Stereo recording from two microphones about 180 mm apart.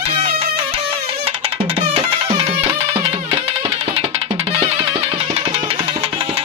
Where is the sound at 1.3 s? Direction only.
35° right (ahead or behind).